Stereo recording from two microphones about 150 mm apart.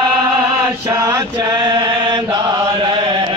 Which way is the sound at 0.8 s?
20° right (ahead or behind).